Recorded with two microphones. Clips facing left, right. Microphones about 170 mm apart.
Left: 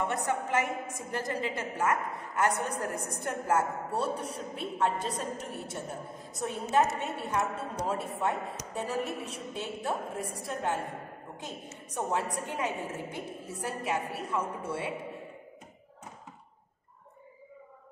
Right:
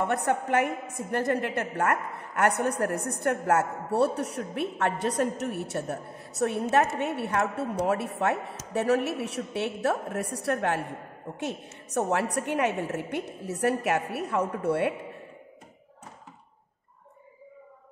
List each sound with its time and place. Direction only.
0.0 s a woman's voice: 60° right (ahead or behind)